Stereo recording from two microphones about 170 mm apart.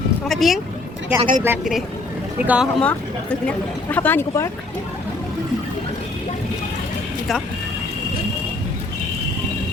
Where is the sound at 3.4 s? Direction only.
10° left (ahead or behind).